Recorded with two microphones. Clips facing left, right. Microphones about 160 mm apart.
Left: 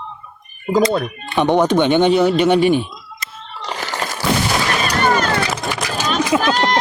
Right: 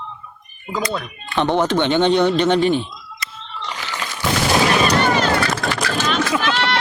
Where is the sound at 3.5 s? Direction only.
40° left (ahead or behind).